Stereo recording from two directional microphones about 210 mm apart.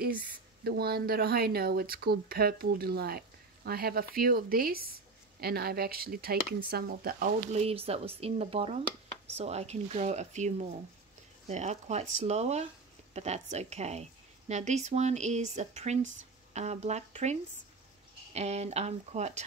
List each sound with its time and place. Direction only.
0.7 s speech: 45° right (ahead or behind)
7.5 s speech: 30° right (ahead or behind)